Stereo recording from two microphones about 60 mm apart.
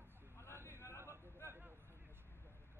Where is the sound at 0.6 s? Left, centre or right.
Left.